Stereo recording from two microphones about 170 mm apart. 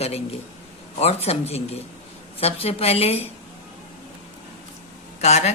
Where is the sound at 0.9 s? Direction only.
35° left (ahead or behind).